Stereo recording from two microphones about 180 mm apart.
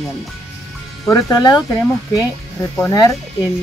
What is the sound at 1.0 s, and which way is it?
Speech, 20° left (ahead or behind).